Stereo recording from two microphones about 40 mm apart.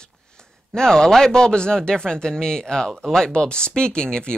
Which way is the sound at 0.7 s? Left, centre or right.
Centre.